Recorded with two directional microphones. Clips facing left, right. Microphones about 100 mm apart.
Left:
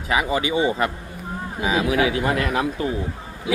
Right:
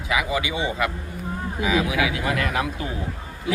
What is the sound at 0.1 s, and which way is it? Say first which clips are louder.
A man's voice: left 3 dB; 35° left (ahead or behind).